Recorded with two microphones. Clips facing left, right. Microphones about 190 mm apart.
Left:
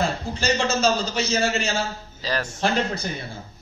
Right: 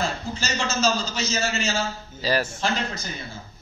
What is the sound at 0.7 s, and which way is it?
Speech, 60° left (ahead or behind).